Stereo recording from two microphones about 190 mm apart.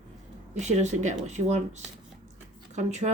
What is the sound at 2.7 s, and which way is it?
Speech, 35° right (ahead or behind).